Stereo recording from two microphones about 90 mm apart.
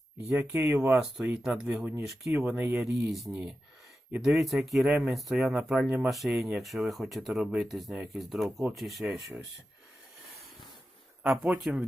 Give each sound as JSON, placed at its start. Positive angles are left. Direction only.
{"t": 0.3, "sound": "speech", "side_deg": -25}
{"t": 1.4, "sound": "speech", "side_deg": -5}
{"t": 2.7, "sound": "speech", "side_deg": 0}
{"t": 4.9, "sound": "speech", "side_deg": -10}
{"t": 6.1, "sound": "speech", "side_deg": 0}
{"t": 11.2, "sound": "speech", "side_deg": -10}